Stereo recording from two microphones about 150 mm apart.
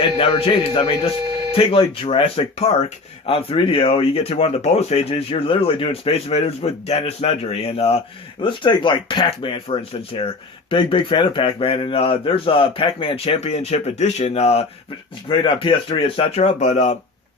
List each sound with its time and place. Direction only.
0.2 s speech: 40° left (ahead or behind)
15.3 s speech: 35° left (ahead or behind); by 17.0 s 50° left (ahead or behind)